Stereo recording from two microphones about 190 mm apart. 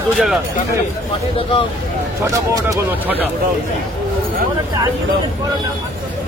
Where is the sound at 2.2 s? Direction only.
15° right (ahead or behind).